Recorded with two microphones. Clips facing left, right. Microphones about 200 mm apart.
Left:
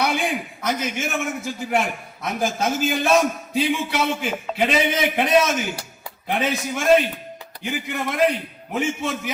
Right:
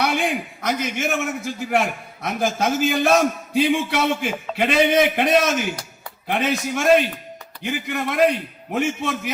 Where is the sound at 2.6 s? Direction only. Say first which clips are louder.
Right 2 dB; 55° right (ahead or behind).